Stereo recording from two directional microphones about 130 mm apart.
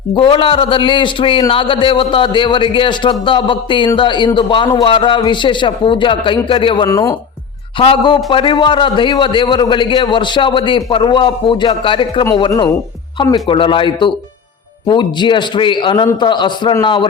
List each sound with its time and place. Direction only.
0.1 s a man's voice: 40° left (ahead or behind)
6.8 s speech: 25° left (ahead or behind)
7.8 s a man's voice: 40° left (ahead or behind)
12.5 s speech: 30° left (ahead or behind)
13.3 s a man's voice: 40° left (ahead or behind)